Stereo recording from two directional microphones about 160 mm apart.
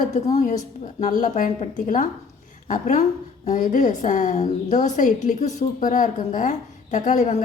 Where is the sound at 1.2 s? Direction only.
50° left (ahead or behind).